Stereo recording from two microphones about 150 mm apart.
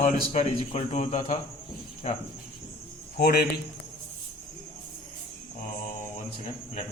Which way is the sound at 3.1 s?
90° left.